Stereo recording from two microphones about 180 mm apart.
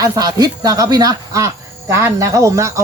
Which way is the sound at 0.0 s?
20° right (ahead or behind).